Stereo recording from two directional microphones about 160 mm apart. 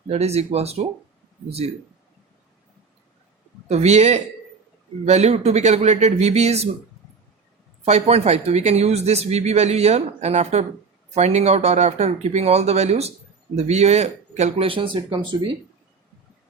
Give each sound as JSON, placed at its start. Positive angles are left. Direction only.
{"t": 0.1, "sound": "speech", "side_deg": -40}
{"t": 3.7, "sound": "speech", "side_deg": -45}
{"t": 7.9, "sound": "speech", "side_deg": -40}